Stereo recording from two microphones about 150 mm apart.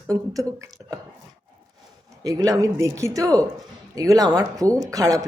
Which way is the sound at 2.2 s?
25° right (ahead or behind).